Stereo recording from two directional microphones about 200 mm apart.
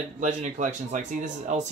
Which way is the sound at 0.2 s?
40° right (ahead or behind).